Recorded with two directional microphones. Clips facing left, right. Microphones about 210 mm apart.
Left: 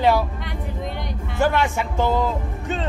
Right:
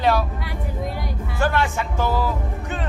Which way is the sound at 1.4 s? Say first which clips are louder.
Left 2 dB; 15° left (ahead or behind).